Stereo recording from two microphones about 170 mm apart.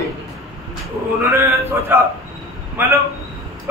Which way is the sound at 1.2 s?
15° right (ahead or behind).